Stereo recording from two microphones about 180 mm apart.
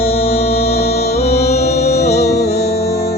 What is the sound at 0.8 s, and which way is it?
Music, 60° left (ahead or behind).